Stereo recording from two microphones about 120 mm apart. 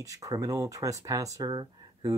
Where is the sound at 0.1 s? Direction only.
30° right (ahead or behind).